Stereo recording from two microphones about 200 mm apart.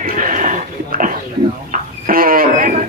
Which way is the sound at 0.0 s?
40° right (ahead or behind).